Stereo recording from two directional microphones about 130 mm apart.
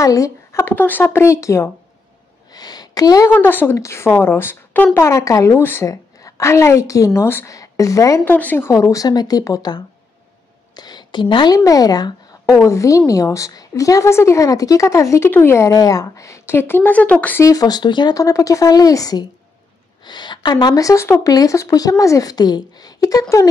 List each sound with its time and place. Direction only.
0.0 s a woman's voice: 25° left (ahead or behind)
2.5 s a sound: 30° left (ahead or behind)
3.3 s a woman's voice: 15° left (ahead or behind)
8.3 s a woman's voice: 15° left (ahead or behind)
17.5 s a woman's voice: 30° left (ahead or behind)